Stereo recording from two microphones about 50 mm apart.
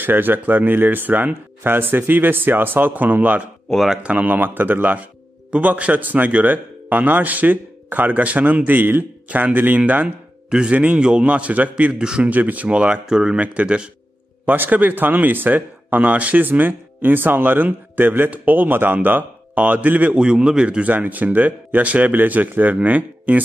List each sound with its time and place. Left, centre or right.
0.0 s a man's voice: right
10.5 s speech: centre
12.0 s a man's voice: centre
12.3 s a man's voice: right
12.6 s speech: right
14.4 s a man's voice: right
20.1 s a man's voice: centre
20.8 s a man's voice: right